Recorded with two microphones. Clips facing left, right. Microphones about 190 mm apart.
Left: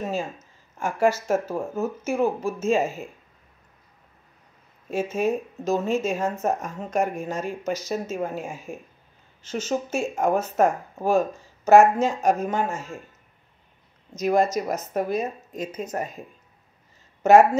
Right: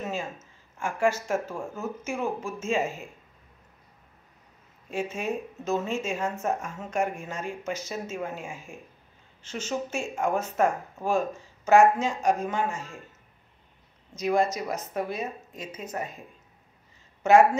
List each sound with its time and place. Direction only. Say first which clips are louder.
0.7 s speech: left 4 dB; 40° left (ahead or behind)
4.9 s speech: left 6 dB; 40° left (ahead or behind)
14.1 s speech: left 4 dB; 45° left (ahead or behind)